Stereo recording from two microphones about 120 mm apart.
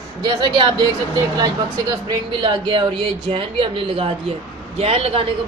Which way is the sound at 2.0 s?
40° right (ahead or behind).